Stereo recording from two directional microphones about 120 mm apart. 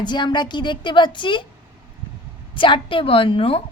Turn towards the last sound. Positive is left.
turn(degrees=50)  # may be behind; listen again after turning